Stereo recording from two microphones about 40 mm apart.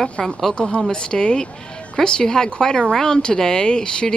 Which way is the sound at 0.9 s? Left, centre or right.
Left.